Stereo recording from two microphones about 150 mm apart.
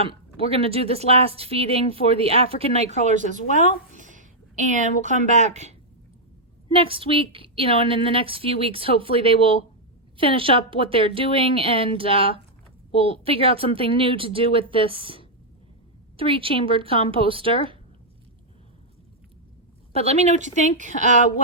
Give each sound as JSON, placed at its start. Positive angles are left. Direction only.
{"t": 0.0, "sound": "speech", "side_deg": -40}
{"t": 3.5, "sound": "a sound", "side_deg": -55}
{"t": 5.2, "sound": "speech", "side_deg": -50}
{"t": 6.7, "sound": "speech", "side_deg": -35}
{"t": 19.9, "sound": "speech", "side_deg": -45}